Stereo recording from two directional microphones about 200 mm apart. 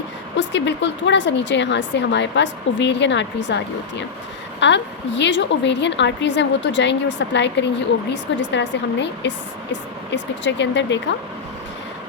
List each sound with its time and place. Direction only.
0.3 s a woman's voice: 65° left (ahead or behind)